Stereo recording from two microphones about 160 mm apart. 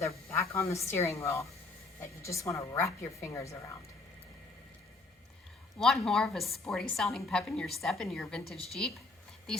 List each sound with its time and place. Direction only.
0.0 s a sound: 20° left (ahead or behind)
0.5 s a woman's voice: 20° left (ahead or behind)
5.8 s a woman's voice: centre (ahead or behind)